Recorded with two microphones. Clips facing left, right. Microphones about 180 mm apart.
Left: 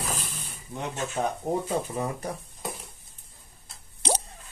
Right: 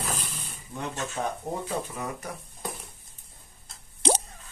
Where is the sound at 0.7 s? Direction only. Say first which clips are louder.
Left 2 dB; 15° left (ahead or behind).